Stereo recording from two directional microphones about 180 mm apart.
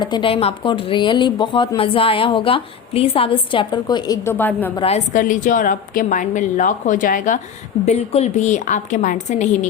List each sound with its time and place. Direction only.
0.0 s speech: 25° left (ahead or behind); by 4.7 s 10° left (ahead or behind)
4.8 s a woman's voice: 40° left (ahead or behind)
7.9 s a woman's voice: 35° left (ahead or behind)